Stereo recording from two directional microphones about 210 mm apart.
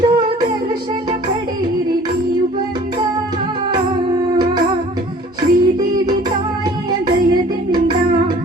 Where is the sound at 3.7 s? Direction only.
25° right (ahead or behind).